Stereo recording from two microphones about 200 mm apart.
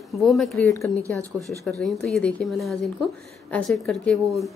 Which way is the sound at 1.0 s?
15° right (ahead or behind).